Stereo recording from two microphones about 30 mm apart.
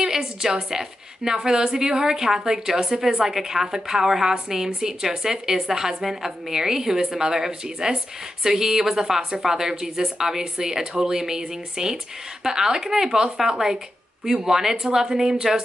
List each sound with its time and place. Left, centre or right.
0.0 s a woman's voice: centre